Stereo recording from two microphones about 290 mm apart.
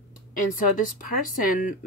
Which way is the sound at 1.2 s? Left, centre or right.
Left.